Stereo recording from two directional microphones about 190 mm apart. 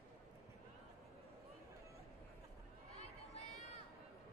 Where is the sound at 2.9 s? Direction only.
35° left (ahead or behind).